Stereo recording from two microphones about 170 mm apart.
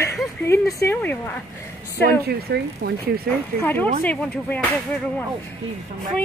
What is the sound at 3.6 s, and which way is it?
Speech, 10° left (ahead or behind).